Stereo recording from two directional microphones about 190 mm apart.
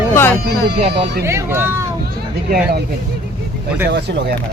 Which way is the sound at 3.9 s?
60° right (ahead or behind).